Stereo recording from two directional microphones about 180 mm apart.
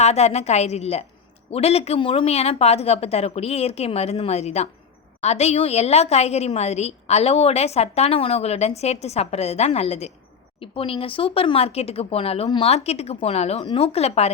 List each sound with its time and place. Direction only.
0.0 s a woman's voice: 35° left (ahead or behind)